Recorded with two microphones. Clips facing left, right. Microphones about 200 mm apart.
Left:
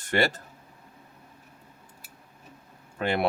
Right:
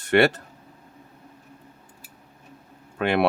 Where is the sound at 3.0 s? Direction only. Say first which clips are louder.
Right 5 dB; 65° right (ahead or behind).